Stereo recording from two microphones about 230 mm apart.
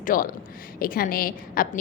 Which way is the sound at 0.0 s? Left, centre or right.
Left.